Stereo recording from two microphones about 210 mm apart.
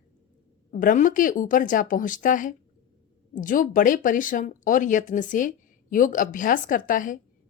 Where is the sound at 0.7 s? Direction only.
40° left (ahead or behind).